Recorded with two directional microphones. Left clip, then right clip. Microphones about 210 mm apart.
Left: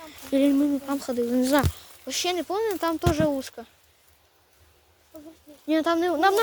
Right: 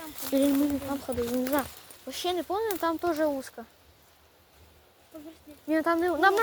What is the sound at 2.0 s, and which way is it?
Speech, 35° left (ahead or behind).